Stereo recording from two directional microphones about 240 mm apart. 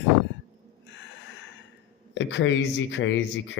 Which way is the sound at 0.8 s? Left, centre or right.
Left.